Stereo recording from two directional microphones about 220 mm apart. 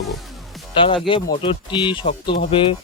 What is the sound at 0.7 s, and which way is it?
Speech, 25° left (ahead or behind).